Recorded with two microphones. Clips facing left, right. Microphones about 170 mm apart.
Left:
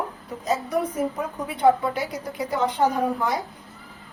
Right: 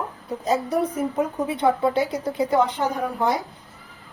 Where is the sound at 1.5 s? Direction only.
25° right (ahead or behind).